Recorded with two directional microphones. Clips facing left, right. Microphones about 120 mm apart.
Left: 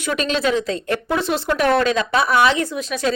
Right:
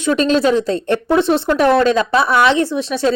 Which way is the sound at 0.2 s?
35° right (ahead or behind).